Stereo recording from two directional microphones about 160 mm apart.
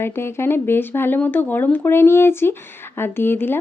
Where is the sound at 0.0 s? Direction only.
15° left (ahead or behind).